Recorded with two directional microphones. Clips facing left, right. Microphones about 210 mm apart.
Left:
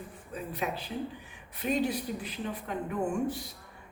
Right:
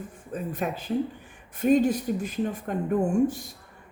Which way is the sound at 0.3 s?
50° right (ahead or behind).